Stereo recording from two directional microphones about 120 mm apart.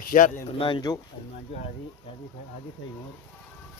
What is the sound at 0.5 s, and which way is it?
Speech, 45° left (ahead or behind).